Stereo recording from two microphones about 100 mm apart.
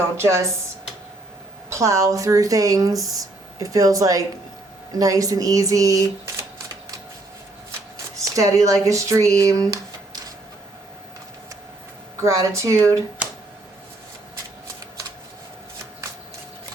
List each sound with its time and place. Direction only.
0.2 s speech: 30° right (ahead or behind)
1.7 s speech: 30° right (ahead or behind)
8.1 s speech: 35° right (ahead or behind)
12.2 s speech: 30° right (ahead or behind)